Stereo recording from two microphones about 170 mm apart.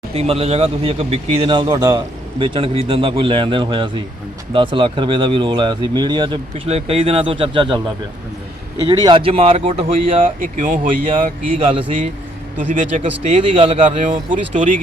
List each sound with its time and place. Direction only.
0.1 s speech: 35° right (ahead or behind)
8.9 s speech: 25° right (ahead or behind)
10.4 s speech: 50° right (ahead or behind)
11.7 s speech: 30° right (ahead or behind)
12.5 s speech: 45° right (ahead or behind)